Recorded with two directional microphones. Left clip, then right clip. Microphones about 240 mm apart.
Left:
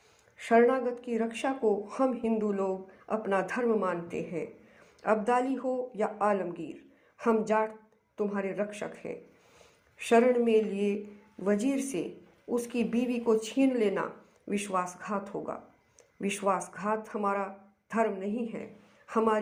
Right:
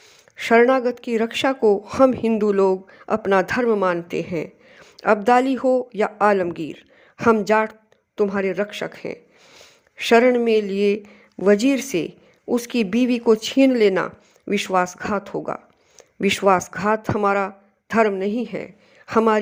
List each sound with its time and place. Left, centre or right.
0.3 s speech: right